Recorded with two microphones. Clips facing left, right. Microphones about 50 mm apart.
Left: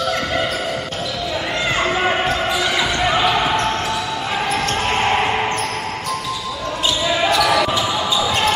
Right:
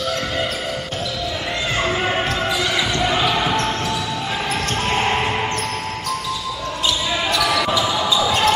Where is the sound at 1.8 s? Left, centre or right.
Centre.